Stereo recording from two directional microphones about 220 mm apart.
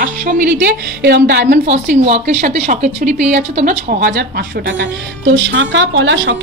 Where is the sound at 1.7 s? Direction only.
30° right (ahead or behind).